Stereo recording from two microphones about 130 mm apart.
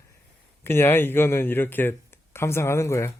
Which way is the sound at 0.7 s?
15° left (ahead or behind).